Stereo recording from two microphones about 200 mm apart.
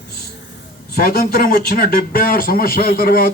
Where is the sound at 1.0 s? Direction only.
50° left (ahead or behind).